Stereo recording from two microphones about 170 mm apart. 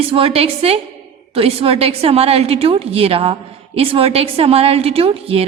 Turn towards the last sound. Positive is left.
turn(degrees=-35)  # may be behind; listen again after turning